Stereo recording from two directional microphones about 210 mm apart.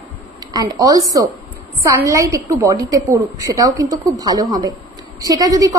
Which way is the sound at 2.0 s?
15° right (ahead or behind).